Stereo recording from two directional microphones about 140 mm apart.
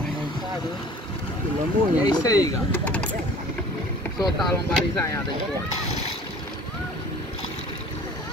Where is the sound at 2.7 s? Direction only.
10° left (ahead or behind).